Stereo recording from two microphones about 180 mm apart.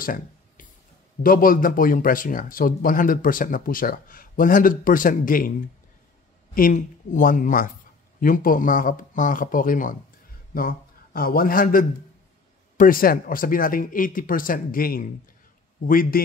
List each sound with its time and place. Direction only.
0.0 s a sound: 50° left (ahead or behind)
1.2 s speech: 50° left (ahead or behind)
6.5 s a man's voice: 50° left (ahead or behind)